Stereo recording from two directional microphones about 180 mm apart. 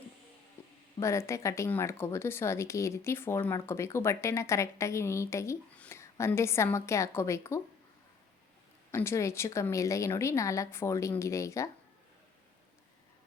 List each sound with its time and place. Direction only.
0.6 s music: 15° left (ahead or behind)
0.9 s speech: 15° left (ahead or behind)
8.9 s speech: 15° left (ahead or behind)